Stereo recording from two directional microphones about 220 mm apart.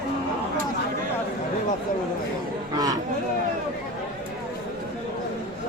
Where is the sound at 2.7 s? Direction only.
15° right (ahead or behind).